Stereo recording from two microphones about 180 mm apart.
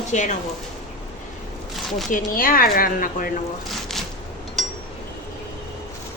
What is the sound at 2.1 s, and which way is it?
A woman's voice, 50° left (ahead or behind).